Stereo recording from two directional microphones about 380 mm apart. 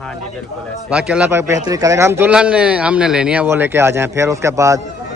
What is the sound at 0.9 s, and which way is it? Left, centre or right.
A man's voice, centre.